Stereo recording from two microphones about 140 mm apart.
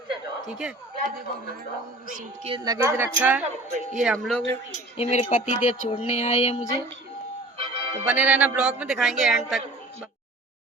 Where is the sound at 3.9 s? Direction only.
5° right (ahead or behind).